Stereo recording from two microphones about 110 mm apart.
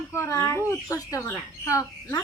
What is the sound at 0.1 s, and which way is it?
A woman's voice, 25° left (ahead or behind).